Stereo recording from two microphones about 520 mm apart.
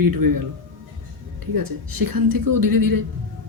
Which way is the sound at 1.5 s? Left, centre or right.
Right.